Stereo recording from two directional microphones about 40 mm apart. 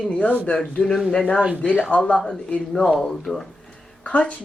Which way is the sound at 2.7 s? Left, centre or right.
Centre.